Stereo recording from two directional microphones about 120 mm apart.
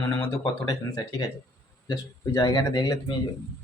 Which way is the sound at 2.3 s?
30° left (ahead or behind).